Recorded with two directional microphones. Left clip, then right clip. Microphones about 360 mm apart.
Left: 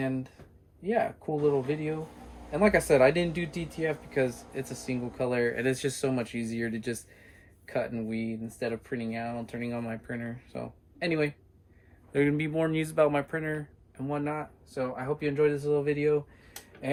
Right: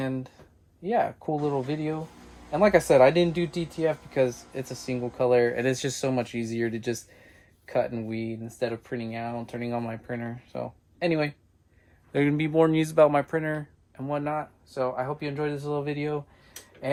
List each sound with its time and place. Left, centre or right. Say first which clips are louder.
0.0 s speech: right 1 dB; centre
2.5 s speech: right 4 dB; centre